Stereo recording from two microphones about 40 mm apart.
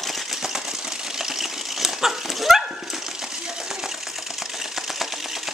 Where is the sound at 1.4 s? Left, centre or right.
Centre.